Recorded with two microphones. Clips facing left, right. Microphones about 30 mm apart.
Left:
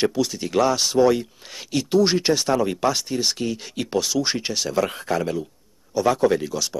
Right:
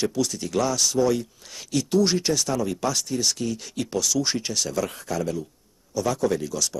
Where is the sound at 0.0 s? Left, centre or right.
Left.